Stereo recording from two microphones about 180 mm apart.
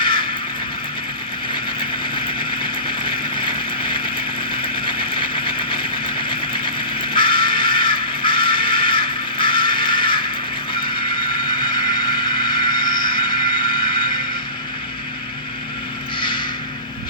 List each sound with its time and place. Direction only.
2.8 s vehicle: 25° left (ahead or behind)
7.1 s music: 25° left (ahead or behind)
12.0 s vehicle: 25° left (ahead or behind)